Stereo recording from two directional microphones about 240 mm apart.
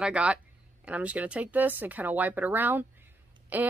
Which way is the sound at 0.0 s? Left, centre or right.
Centre.